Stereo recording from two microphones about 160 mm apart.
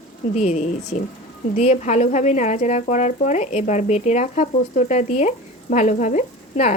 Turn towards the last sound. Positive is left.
turn(degrees=50)  # may be behind; listen again after turning